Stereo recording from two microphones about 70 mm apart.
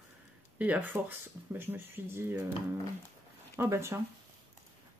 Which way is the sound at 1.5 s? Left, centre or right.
Right.